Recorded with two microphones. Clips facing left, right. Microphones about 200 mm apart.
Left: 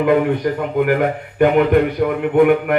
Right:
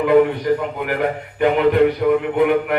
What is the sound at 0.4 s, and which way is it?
Speech, 50° left (ahead or behind).